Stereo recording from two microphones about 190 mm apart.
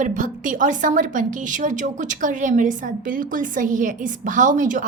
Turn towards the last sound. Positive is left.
turn(degrees=-45)  # may be behind; listen again after turning